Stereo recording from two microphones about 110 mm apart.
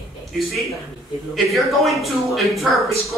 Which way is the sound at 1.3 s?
Centre (ahead or behind).